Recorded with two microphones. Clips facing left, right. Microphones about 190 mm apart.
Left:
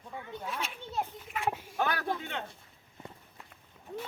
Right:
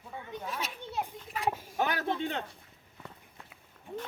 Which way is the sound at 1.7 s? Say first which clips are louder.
Right 1 dB; 20° right (ahead or behind).